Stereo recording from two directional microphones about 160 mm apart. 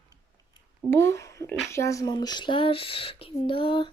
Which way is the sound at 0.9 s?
15° left (ahead or behind).